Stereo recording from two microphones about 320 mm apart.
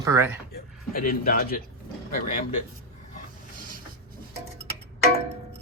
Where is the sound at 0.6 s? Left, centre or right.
Left.